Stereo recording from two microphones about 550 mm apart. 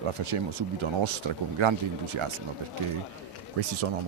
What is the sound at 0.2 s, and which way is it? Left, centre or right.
Speech, right.